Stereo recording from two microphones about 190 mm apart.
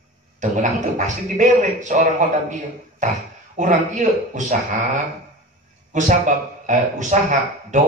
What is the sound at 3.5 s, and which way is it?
Speech, 40° right (ahead or behind).